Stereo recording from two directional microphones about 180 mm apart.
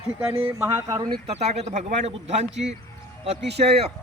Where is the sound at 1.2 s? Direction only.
35° right (ahead or behind).